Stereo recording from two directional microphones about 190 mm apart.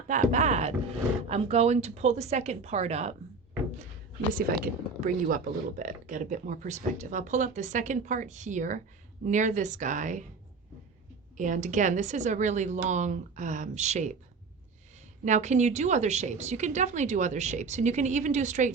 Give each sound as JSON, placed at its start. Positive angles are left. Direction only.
{"t": 0.1, "sound": "a sound", "side_deg": -40}
{"t": 1.3, "sound": "speech", "side_deg": -35}
{"t": 4.3, "sound": "speech", "side_deg": -45}
{"t": 11.3, "sound": "speech", "side_deg": -40}
{"t": 15.2, "sound": "speech", "side_deg": -40}